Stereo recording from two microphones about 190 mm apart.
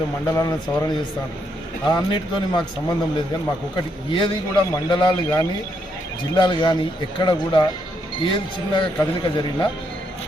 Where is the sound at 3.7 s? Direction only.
25° left (ahead or behind).